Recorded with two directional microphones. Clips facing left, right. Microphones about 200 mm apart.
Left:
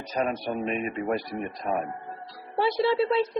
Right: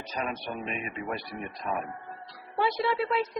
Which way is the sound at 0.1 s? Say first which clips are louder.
Left 7 dB; 40° left (ahead or behind).